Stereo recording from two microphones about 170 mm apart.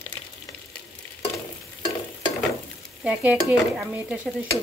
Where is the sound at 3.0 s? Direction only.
5° right (ahead or behind).